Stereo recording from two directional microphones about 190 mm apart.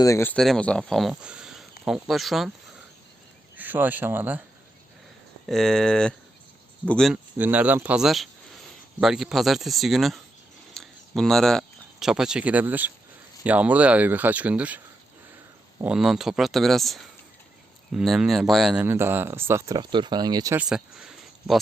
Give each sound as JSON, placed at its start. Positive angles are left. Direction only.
{"t": 0.0, "sound": "speech", "side_deg": 15}
{"t": 0.3, "sound": "speech", "side_deg": 5}
{"t": 3.6, "sound": "speech", "side_deg": -10}
{"t": 5.5, "sound": "speech", "side_deg": 0}
{"t": 7.3, "sound": "speech", "side_deg": -10}
{"t": 15.8, "sound": "speech", "side_deg": -5}
{"t": 20.6, "sound": "speech", "side_deg": -5}